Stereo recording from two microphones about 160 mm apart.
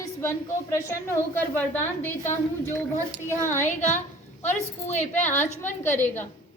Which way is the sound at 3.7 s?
45° left (ahead or behind).